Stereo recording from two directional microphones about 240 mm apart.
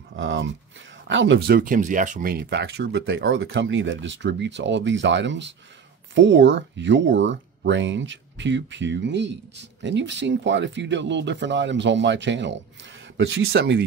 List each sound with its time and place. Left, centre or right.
0.1 s a sound: right
1.0 s speech: right
1.6 s speech: right